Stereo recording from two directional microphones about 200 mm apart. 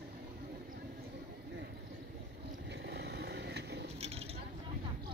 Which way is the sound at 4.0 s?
30° right (ahead or behind).